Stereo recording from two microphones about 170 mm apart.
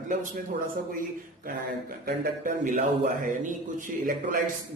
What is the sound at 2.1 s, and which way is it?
A man's voice, 55° right (ahead or behind).